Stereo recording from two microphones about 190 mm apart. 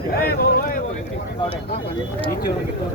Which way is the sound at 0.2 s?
50° left (ahead or behind).